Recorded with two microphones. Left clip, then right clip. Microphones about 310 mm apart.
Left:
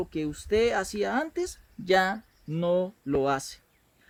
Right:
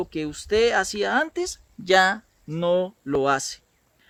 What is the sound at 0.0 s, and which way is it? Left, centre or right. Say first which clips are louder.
Speech: right 3 dB; right.